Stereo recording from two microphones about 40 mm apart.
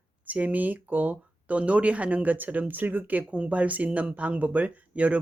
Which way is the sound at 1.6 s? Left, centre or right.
Right.